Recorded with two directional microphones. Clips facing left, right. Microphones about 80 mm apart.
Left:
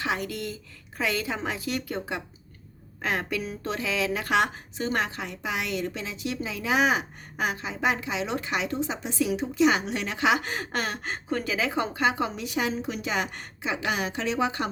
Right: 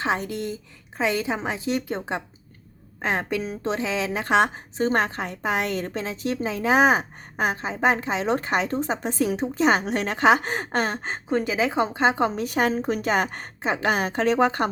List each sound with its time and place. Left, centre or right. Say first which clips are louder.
0.0 s a woman's voice: right 4 dB; right